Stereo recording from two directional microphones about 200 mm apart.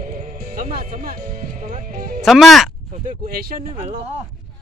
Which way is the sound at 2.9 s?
45° right (ahead or behind).